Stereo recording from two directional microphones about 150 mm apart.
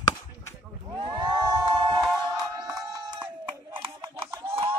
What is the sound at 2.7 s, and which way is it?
Chicken, 25° right (ahead or behind).